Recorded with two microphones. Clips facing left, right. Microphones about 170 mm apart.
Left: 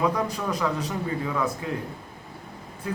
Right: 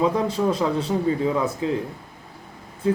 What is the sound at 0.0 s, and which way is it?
A man's voice, 25° right (ahead or behind).